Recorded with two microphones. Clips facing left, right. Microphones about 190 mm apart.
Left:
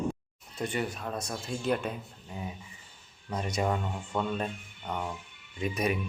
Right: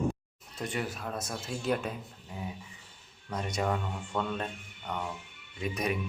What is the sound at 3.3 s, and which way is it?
Speech, 5° left (ahead or behind).